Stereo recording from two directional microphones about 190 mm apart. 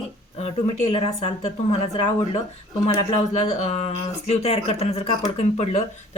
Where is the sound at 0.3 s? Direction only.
35° left (ahead or behind).